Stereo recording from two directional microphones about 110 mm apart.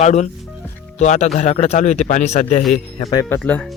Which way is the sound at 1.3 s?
80° left.